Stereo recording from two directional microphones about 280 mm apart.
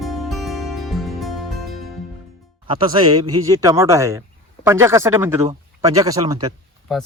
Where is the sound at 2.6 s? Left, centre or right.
Centre.